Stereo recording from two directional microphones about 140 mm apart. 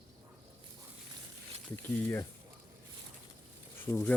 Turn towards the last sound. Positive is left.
turn(degrees=15)  # may be behind; listen again after turning